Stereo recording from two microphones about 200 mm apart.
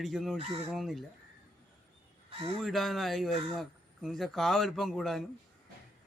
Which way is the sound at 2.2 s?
30° right (ahead or behind).